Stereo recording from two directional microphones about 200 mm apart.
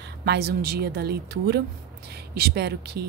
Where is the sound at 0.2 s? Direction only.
50° right (ahead or behind).